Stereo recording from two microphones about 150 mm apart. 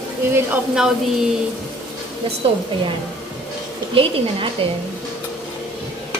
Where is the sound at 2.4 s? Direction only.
35° right (ahead or behind).